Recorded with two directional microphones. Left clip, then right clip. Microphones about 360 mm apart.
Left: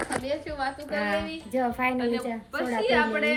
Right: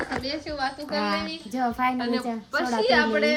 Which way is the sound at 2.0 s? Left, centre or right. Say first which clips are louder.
Right 1 dB; right.